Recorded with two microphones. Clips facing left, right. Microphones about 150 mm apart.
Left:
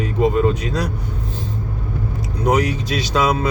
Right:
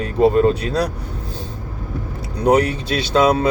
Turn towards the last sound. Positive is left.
turn(degrees=-30)  # may be behind; listen again after turning